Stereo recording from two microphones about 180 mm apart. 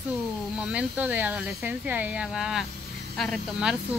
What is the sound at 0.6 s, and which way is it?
Speech, 5° right (ahead or behind).